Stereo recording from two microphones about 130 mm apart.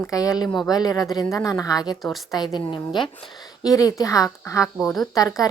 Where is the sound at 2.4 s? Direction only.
35° left (ahead or behind).